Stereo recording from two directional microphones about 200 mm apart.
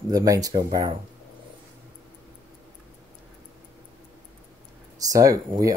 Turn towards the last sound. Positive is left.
turn(degrees=-15)  # may be behind; listen again after turning